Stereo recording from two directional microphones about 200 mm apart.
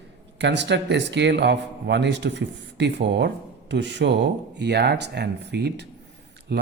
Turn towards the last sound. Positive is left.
turn(degrees=-55)  # may be behind; listen again after turning